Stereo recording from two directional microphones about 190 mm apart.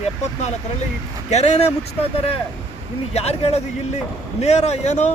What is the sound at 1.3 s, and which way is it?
Speech, 35° left (ahead or behind).